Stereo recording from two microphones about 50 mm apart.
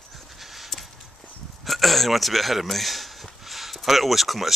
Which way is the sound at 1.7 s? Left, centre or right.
Centre.